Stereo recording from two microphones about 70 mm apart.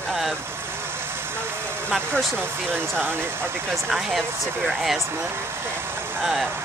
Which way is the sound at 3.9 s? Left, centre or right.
Centre.